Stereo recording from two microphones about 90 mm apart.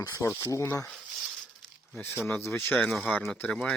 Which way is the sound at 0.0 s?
35° left (ahead or behind).